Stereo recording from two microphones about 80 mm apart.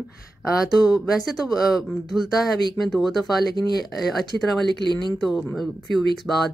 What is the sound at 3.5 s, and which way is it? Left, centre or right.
Speech, left.